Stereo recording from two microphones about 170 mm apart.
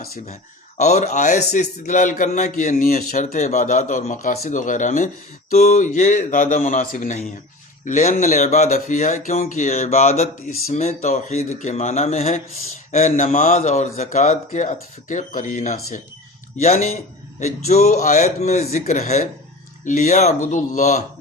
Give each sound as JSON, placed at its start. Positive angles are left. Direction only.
{"t": 0.8, "sound": "a man's voice", "side_deg": 40}